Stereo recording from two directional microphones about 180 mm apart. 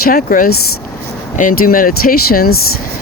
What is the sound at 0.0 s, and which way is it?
Speech, 50° left (ahead or behind).